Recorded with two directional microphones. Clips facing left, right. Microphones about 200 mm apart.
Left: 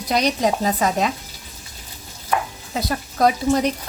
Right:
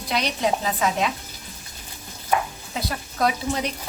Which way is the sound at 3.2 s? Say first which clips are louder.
Left 5 dB; 45° left (ahead or behind).